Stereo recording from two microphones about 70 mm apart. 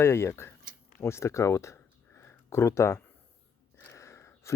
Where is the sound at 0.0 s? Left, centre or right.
Left.